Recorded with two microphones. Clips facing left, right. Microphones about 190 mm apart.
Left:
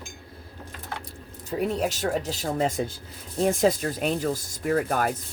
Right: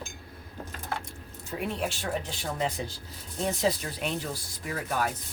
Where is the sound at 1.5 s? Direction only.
40° left (ahead or behind).